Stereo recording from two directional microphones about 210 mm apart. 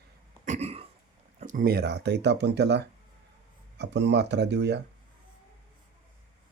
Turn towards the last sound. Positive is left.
turn(degrees=-55)  # may be behind; listen again after turning